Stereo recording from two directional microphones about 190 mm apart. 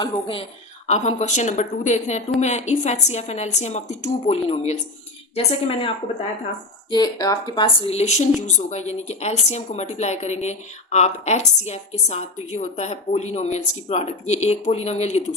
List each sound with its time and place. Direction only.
0.0 s a woman's voice: 30° left (ahead or behind)
6.9 s a woman's voice: 20° left (ahead or behind)